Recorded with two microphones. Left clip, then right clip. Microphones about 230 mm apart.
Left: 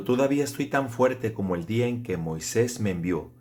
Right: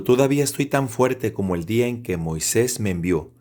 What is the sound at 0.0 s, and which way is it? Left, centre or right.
A man's voice, right.